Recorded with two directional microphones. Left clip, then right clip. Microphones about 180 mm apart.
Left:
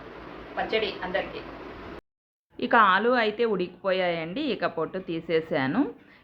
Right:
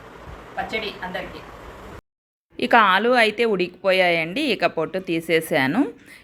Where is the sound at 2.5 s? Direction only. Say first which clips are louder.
Right 4 dB; 20° right (ahead or behind).